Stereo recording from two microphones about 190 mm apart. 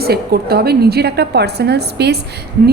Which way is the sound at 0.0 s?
55° right (ahead or behind).